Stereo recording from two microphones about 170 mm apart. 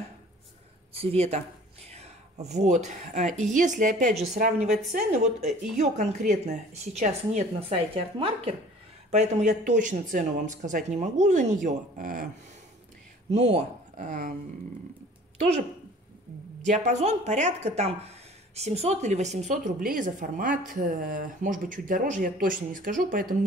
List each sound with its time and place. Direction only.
0.9 s speech: 40° right (ahead or behind)
4.1 s speech: centre (ahead or behind)
4.6 s a woman's voice: 40° right (ahead or behind)
9.1 s speech: 45° right (ahead or behind)
13.3 s speech: 40° right (ahead or behind)
16.6 s speech: 45° right (ahead or behind)